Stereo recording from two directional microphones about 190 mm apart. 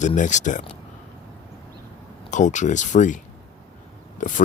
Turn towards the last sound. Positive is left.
turn(degrees=40)  # may be behind; listen again after turning